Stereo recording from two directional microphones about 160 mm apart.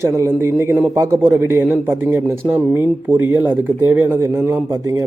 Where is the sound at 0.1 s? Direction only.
15° right (ahead or behind).